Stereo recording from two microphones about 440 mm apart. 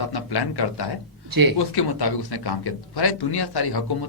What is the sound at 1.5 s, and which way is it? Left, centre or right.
Speech, left.